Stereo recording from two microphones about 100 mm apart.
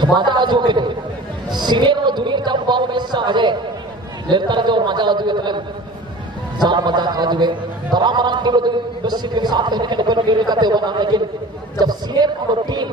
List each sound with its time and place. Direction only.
0.0 s a man's voice: 50° right (ahead or behind)
6.6 s a man's voice: 50° right (ahead or behind)